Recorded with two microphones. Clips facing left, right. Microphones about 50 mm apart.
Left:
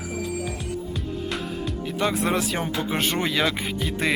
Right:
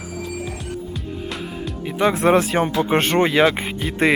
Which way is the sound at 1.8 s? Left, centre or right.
Centre.